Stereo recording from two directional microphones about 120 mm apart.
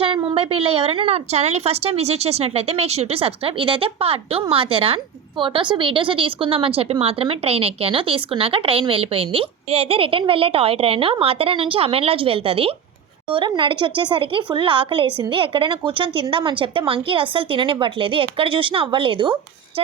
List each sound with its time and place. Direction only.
0.0 s a woman's voice: 45° right (ahead or behind)